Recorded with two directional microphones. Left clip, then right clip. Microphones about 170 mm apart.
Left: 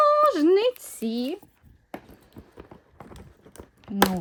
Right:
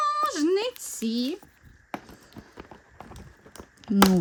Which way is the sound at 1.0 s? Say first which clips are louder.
Even; 15° right (ahead or behind).